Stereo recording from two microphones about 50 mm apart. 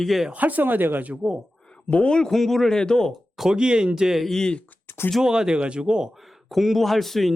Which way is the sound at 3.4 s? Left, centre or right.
Centre.